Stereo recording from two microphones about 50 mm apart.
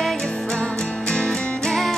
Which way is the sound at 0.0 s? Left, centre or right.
Centre.